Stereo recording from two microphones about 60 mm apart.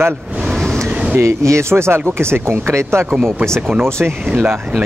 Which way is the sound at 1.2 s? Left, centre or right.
Right.